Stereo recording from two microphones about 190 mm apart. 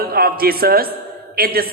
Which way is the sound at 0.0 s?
50° right (ahead or behind).